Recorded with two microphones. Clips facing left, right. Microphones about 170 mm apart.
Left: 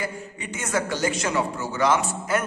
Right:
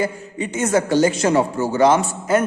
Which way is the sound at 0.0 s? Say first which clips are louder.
Right 9 dB; 25° right (ahead or behind).